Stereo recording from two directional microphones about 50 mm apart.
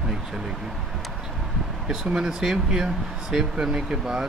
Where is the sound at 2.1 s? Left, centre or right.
Centre.